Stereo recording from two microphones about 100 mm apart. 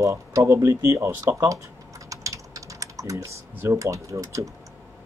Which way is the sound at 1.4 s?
30° right (ahead or behind).